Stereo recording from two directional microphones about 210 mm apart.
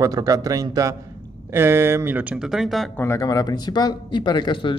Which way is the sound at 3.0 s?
15° left (ahead or behind).